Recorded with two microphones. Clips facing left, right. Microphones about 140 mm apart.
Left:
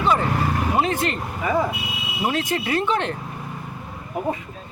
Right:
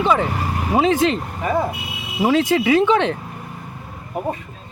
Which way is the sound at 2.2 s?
90° right.